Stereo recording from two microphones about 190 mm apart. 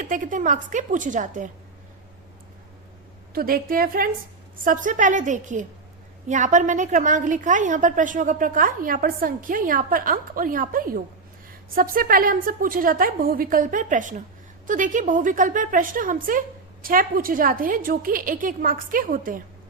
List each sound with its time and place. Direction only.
0.0 s a woman's voice: 45° right (ahead or behind)
3.3 s a woman's voice: 50° right (ahead or behind)